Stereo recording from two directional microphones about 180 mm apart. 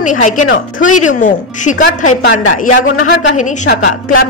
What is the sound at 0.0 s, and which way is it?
A woman's voice, 45° left (ahead or behind).